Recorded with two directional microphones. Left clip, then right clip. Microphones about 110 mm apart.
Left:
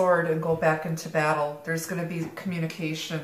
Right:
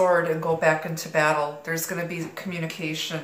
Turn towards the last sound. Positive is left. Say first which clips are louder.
# right 2 dB
turn(degrees=-20)  # may be behind; listen again after turning